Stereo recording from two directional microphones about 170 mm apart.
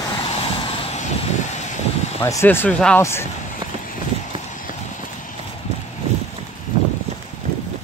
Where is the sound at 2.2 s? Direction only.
15° left (ahead or behind).